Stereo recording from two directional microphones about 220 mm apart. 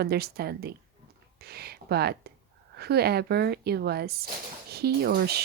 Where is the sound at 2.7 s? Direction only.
45° right (ahead or behind).